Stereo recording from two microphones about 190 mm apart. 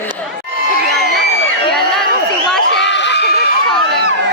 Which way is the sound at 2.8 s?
70° left (ahead or behind).